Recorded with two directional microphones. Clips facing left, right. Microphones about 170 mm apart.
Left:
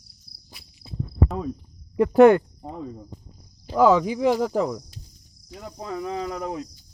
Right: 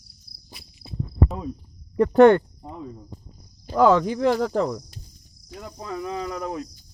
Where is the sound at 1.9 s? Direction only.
10° left (ahead or behind).